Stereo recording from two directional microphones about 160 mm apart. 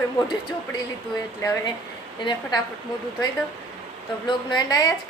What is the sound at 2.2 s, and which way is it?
Speech, 30° left (ahead or behind).